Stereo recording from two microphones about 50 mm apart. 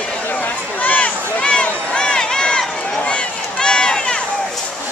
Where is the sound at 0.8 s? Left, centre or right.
Left.